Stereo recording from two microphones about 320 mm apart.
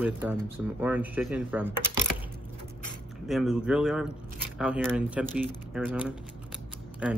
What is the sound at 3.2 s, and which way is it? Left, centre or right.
Speech, centre.